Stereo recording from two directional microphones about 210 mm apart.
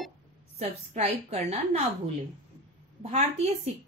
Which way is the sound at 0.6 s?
30° right (ahead or behind).